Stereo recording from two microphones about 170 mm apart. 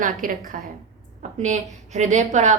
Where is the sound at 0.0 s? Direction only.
50° right (ahead or behind).